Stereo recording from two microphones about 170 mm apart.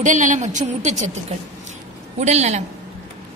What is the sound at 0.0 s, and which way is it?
A woman's voice, 45° right (ahead or behind).